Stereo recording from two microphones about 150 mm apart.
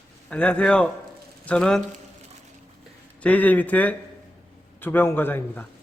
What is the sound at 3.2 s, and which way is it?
A man's voice, 10° left (ahead or behind).